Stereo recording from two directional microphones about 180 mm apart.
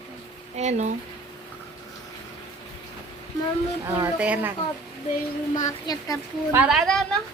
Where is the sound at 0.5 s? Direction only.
40° right (ahead or behind).